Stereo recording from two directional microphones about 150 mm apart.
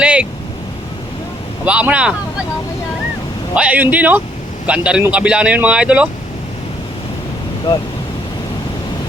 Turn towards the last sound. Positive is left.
turn(degrees=25)  # may be behind; listen again after turning